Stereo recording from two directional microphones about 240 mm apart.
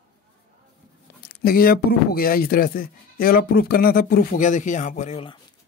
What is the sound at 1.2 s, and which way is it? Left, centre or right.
Speech, left.